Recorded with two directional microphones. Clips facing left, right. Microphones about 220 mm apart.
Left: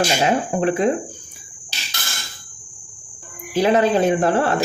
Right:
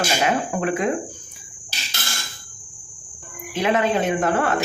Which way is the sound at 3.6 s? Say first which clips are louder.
Left 4 dB; 35° left (ahead or behind).